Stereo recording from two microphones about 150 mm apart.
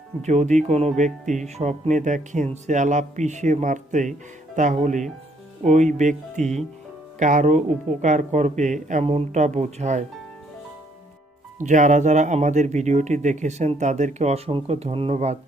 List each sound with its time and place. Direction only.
0.2 s speech: 50° right (ahead or behind)
11.6 s speech: 55° right (ahead or behind)